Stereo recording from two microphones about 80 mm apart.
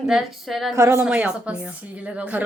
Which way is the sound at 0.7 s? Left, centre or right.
Right.